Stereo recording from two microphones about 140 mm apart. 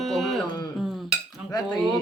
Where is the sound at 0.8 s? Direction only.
Centre (ahead or behind).